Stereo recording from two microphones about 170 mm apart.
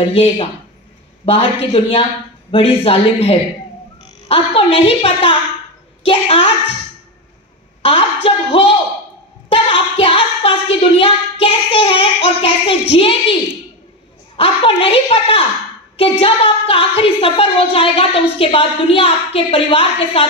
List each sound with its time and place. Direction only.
0.1 s a woman's voice: 35° left (ahead or behind)
7.8 s a woman's voice: 35° left (ahead or behind)
9.5 s child singing: 35° left (ahead or behind)
12.9 s a woman's voice: 30° left (ahead or behind)